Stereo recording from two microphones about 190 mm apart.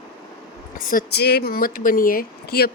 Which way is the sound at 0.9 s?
60° left (ahead or behind).